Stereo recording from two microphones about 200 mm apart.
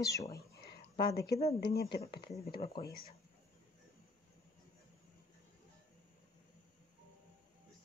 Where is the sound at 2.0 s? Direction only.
25° left (ahead or behind).